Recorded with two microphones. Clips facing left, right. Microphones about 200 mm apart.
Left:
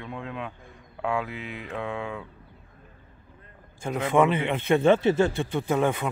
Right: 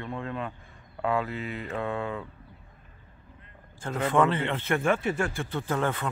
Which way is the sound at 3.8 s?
15° left (ahead or behind).